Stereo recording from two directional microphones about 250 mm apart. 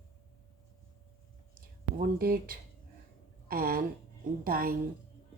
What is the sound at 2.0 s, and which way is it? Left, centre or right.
Speech, right.